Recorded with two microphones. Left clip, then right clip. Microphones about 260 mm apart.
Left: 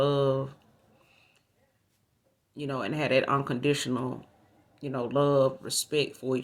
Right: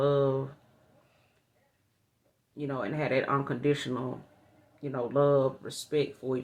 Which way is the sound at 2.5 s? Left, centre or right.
Left.